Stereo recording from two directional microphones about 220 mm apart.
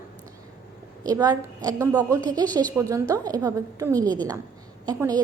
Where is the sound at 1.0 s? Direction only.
15° right (ahead or behind).